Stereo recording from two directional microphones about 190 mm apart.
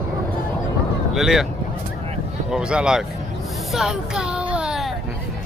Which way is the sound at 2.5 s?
5° right (ahead or behind).